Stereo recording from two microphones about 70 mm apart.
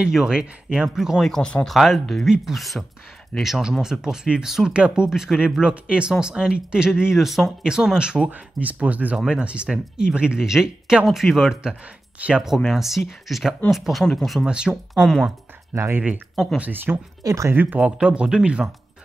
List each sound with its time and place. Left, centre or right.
0.0 s speech: centre
1.2 s speech: centre
1.7 s speech: centre
12.2 s speech: centre
12.5 s speech: centre
14.4 s speech: centre
15.7 s speech: right
16.0 s speech: centre
16.5 s speech: right
17.2 s speech: right
17.6 s speech: right